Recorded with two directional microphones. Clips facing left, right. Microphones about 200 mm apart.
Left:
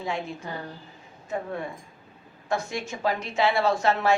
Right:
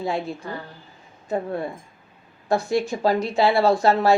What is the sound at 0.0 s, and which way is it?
Speech, 35° right (ahead or behind).